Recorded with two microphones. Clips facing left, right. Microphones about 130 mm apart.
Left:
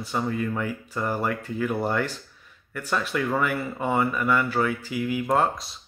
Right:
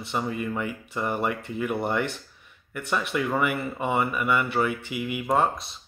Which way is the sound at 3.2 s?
5° right (ahead or behind).